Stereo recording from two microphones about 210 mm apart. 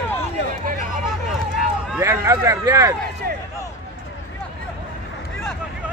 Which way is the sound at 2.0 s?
15° right (ahead or behind).